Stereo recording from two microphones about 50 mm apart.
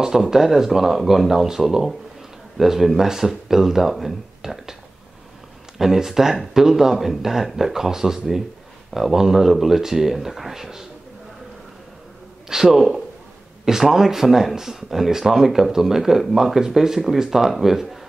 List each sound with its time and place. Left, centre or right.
0.0 s speech: centre
5.8 s speech: centre
12.4 s speech: centre